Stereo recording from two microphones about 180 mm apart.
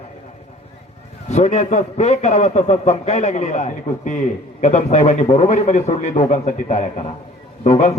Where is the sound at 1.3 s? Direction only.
40° left (ahead or behind).